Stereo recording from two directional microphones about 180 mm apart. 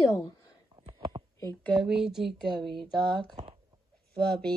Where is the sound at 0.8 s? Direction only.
25° right (ahead or behind).